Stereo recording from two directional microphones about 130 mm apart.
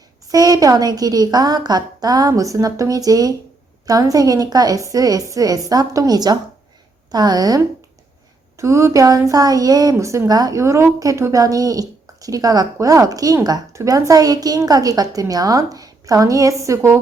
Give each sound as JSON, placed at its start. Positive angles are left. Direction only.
{"t": 0.3, "sound": "a woman's voice", "side_deg": -30}